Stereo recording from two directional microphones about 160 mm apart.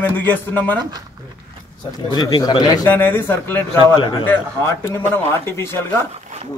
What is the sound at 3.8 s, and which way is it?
Speech, 30° left (ahead or behind).